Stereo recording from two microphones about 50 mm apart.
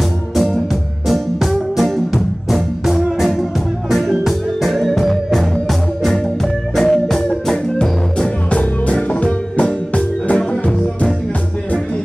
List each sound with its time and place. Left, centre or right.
1.0 s music: centre
1.5 s music: centre
8.5 s music: left